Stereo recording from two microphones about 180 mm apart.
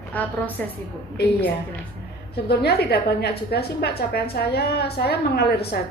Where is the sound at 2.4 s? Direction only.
65° left (ahead or behind).